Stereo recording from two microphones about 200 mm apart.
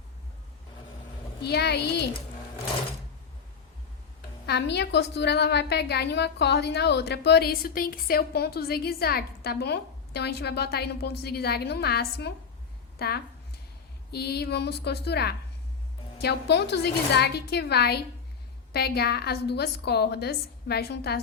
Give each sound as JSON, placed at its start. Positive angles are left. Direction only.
{"t": 1.4, "sound": "a woman's voice", "side_deg": 55}
{"t": 4.4, "sound": "a woman's voice", "side_deg": 55}